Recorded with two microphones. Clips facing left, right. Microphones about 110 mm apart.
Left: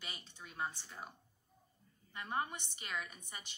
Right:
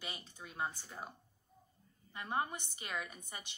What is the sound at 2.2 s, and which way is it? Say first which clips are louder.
Speech: right 2 dB; 20° right (ahead or behind).